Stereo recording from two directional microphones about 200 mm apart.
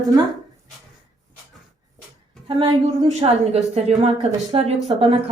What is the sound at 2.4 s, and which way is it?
Speech, 25° right (ahead or behind).